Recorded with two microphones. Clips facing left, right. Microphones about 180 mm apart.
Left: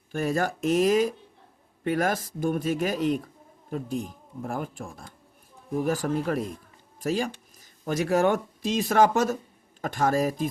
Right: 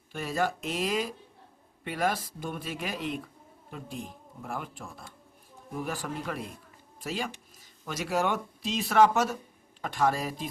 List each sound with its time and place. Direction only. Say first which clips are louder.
0.2 s speech: left 4 dB; 45° left (ahead or behind)